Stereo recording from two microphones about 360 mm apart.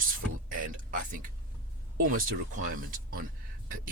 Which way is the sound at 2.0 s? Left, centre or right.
Right.